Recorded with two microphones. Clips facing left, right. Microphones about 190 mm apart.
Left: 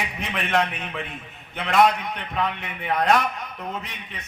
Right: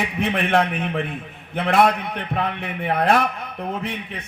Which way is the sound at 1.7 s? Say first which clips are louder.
Right 1 dB; 55° right (ahead or behind).